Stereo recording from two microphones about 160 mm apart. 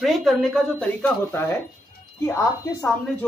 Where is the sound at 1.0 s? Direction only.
15° left (ahead or behind).